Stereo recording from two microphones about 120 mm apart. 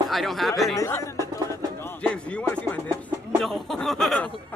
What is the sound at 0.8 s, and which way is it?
Speech, 25° left (ahead or behind).